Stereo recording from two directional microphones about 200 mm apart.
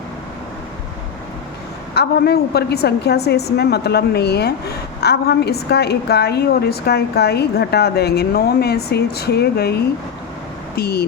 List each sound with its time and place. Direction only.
2.0 s a woman's voice: 55° left (ahead or behind)